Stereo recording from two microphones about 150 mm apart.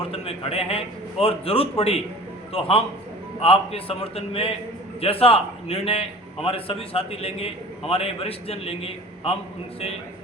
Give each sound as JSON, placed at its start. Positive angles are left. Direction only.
{"t": 0.1, "sound": "a man's voice", "side_deg": 40}